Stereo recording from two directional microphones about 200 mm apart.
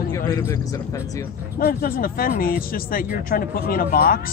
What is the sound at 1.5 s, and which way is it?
Speech, 45° left (ahead or behind).